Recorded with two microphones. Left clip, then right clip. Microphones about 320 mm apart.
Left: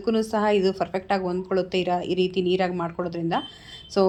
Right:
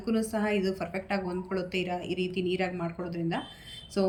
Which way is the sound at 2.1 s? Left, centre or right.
Left.